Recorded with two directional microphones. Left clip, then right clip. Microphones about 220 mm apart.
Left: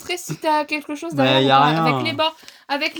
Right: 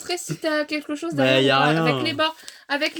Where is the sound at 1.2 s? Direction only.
20° left (ahead or behind).